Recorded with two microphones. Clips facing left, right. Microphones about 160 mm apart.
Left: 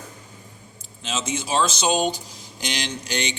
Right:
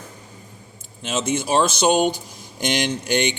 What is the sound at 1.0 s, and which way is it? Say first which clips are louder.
A man's voice: right 5 dB; 55° right (ahead or behind).